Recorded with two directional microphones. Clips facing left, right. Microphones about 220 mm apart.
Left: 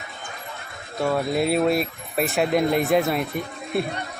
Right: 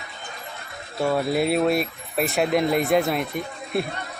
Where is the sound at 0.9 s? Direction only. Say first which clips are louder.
Even; centre (ahead or behind).